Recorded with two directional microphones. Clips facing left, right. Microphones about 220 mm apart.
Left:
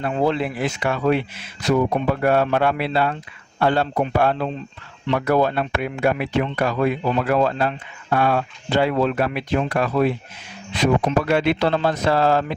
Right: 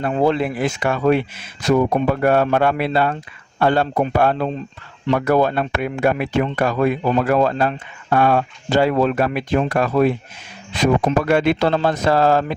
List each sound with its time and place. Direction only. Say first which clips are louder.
0.0 s speech: right 3 dB; 45° right (ahead or behind)